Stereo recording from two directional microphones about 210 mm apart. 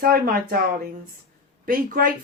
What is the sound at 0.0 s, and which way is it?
Speech, 45° right (ahead or behind).